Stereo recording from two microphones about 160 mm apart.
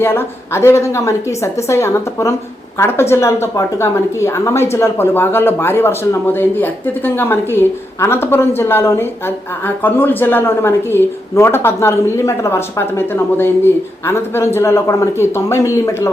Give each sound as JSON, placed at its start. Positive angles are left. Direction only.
{"t": 0.0, "sound": "a woman's voice", "side_deg": 15}